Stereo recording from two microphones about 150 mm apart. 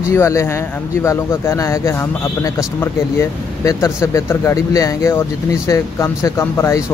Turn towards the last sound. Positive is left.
turn(degrees=15)  # may be behind; listen again after turning